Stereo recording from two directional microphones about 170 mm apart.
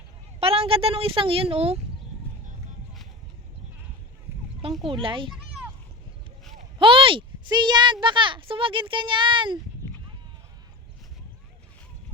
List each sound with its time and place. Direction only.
0.3 s speech: 35° right (ahead or behind)
4.6 s a sound: 35° right (ahead or behind)
5.0 s speech: 30° right (ahead or behind)
6.7 s speech: 30° right (ahead or behind)